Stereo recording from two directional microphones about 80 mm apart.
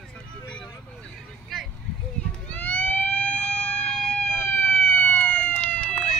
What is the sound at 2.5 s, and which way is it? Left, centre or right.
Police car, centre.